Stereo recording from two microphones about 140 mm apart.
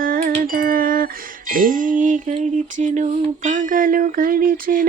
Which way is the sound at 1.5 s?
75° right (ahead or behind).